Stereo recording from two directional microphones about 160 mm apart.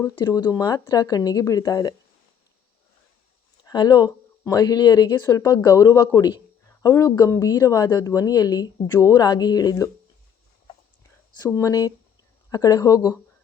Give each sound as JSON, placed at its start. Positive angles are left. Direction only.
{"t": 0.2, "sound": "speech", "side_deg": 25}
{"t": 3.6, "sound": "speech", "side_deg": 25}
{"t": 11.3, "sound": "speech", "side_deg": 20}